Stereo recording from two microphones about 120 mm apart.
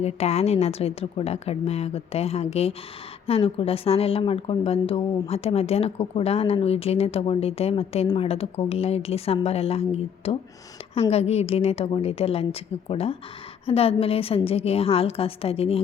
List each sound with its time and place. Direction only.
0.0 s a woman's voice: 60° left (ahead or behind)